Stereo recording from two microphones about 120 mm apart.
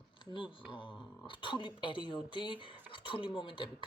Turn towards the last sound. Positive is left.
turn(degrees=40)  # may be behind; listen again after turning